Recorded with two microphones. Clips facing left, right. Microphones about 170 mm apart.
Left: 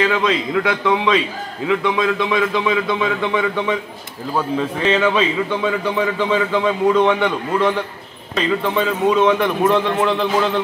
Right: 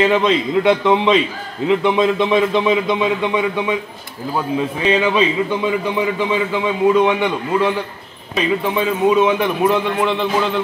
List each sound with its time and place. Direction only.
0.0 s a man's voice: 25° right (ahead or behind); by 10.6 s centre (ahead or behind)